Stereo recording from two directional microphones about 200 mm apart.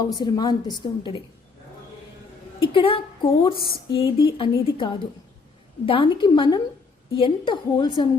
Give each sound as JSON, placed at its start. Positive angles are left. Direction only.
{"t": 0.2, "sound": "speech", "side_deg": 20}
{"t": 2.6, "sound": "a woman's voice", "side_deg": 25}
{"t": 3.6, "sound": "a sound", "side_deg": 50}
{"t": 3.9, "sound": "speech", "side_deg": 25}